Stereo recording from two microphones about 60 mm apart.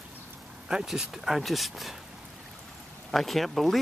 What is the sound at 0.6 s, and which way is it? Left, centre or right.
Speech, centre.